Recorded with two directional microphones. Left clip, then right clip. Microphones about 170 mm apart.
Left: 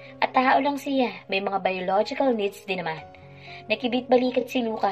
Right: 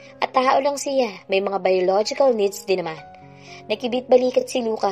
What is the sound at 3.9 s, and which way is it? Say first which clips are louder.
Speech: right 6 dB; 45° right (ahead or behind).